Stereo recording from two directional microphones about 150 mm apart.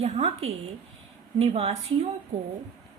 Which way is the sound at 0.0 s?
45° right (ahead or behind).